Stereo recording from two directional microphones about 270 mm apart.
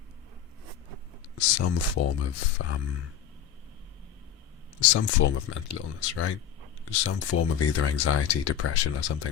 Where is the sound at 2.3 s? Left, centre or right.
Left.